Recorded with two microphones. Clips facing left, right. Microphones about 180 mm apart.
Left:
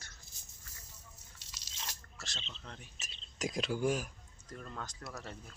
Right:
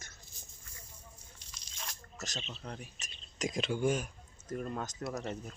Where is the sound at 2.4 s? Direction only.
10° right (ahead or behind).